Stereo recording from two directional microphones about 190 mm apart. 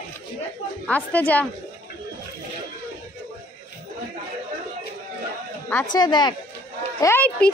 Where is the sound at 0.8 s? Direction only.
10° left (ahead or behind).